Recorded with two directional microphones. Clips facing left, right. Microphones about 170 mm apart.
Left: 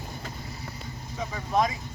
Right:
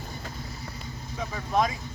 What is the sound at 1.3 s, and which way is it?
Speech, centre (ahead or behind).